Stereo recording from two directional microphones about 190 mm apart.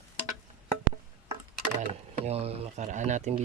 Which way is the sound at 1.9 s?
30° right (ahead or behind).